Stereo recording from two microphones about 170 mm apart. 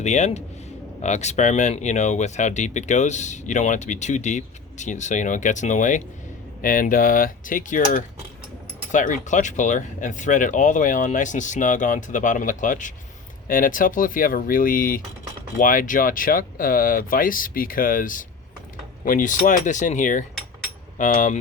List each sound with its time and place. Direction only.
0.0 s speech: 45° left (ahead or behind)